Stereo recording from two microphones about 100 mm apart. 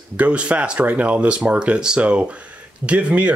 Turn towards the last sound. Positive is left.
turn(degrees=-10)  # may be behind; listen again after turning